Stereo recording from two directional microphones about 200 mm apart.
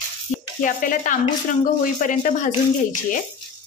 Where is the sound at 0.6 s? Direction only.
40° left (ahead or behind).